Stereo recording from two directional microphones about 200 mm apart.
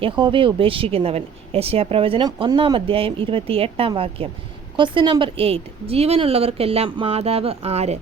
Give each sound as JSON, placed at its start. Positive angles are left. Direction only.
{"t": 0.0, "sound": "speech", "side_deg": -25}